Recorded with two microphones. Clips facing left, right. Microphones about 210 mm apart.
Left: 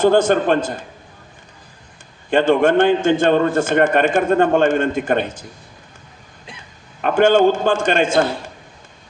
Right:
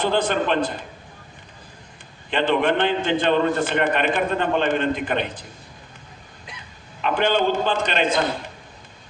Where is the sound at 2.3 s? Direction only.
45° left (ahead or behind).